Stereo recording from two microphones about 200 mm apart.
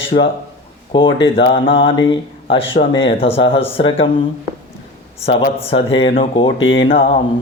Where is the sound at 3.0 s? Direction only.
25° left (ahead or behind).